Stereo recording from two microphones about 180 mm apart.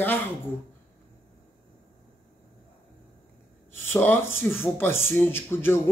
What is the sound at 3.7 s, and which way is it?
Speech, 10° left (ahead or behind).